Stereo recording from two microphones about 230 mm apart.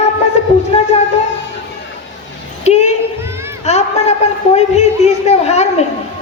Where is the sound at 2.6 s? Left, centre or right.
Left.